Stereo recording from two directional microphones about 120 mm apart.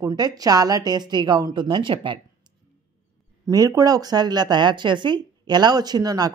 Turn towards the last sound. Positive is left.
turn(degrees=-30)  # may be behind; listen again after turning